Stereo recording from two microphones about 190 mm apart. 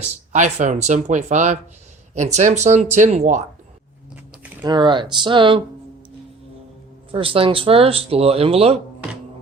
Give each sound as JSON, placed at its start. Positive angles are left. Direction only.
{"t": 0.3, "sound": "speech", "side_deg": -40}
{"t": 4.6, "sound": "speech", "side_deg": -25}
{"t": 7.1, "sound": "speech", "side_deg": -30}